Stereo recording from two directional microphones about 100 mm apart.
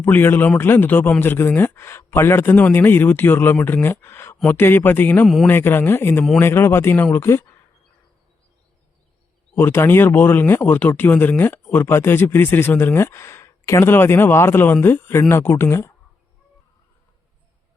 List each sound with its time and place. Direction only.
0.0 s speech: 20° left (ahead or behind)
5.2 s a man's voice: centre (ahead or behind)
5.5 s speech: 20° left (ahead or behind)
9.6 s speech: 25° left (ahead or behind)